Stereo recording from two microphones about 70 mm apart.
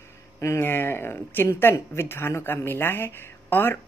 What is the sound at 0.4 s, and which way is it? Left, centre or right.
Speech, left.